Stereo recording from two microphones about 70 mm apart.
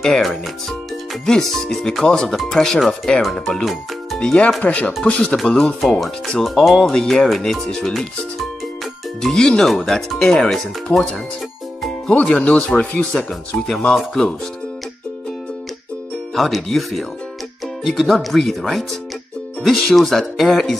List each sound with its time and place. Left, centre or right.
0.0 s speech: centre
4.6 s speech: left
9.2 s speech: centre
13.1 s speech: centre
16.3 s speech: centre